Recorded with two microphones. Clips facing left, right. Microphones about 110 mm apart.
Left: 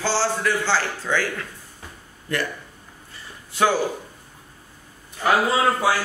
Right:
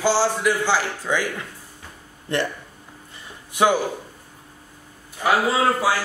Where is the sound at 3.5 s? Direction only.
15° right (ahead or behind).